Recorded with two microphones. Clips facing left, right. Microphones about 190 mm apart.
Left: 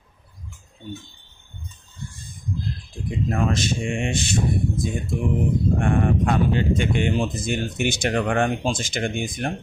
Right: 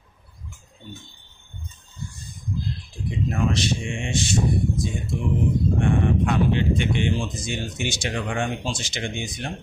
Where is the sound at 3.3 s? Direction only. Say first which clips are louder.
Left 1 dB; 55° left (ahead or behind).